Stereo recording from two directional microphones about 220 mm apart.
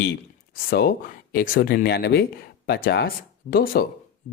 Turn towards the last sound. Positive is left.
turn(degrees=45)  # may be behind; listen again after turning